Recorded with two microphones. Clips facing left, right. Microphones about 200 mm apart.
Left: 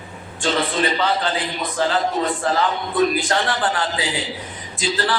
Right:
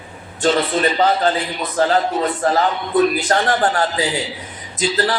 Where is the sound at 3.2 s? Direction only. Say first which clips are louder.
Right 4 dB; 40° right (ahead or behind).